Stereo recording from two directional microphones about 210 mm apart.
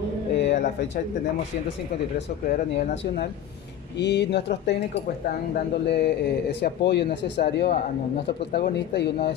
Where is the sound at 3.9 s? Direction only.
55° left (ahead or behind).